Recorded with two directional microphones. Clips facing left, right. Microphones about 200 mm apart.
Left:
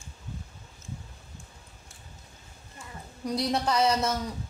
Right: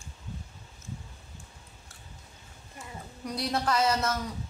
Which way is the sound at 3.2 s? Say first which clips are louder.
Left 3 dB; 20° left (ahead or behind).